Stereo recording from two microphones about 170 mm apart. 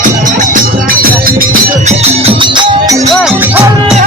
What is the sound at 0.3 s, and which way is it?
Music, 55° right (ahead or behind).